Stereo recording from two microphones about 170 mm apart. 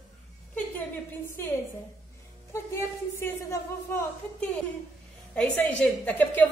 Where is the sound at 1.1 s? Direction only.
15° left (ahead or behind).